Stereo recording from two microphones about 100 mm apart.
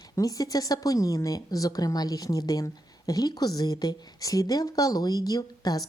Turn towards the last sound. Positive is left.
turn(degrees=40)  # may be behind; listen again after turning